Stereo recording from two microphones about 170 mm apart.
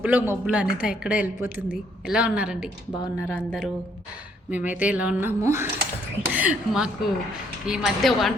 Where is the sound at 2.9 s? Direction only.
25° left (ahead or behind).